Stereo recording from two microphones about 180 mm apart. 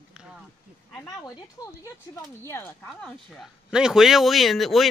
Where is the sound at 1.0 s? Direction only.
20° left (ahead or behind).